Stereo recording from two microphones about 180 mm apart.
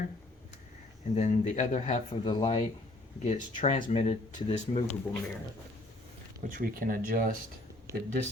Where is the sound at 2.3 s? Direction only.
30° left (ahead or behind).